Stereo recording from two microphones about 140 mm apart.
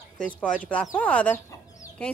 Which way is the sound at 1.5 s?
25° left (ahead or behind).